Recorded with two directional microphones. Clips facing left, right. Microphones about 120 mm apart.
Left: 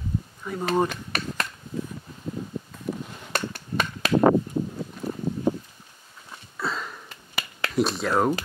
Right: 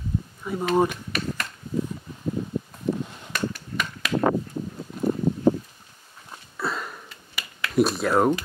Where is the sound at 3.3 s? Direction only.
30° left (ahead or behind).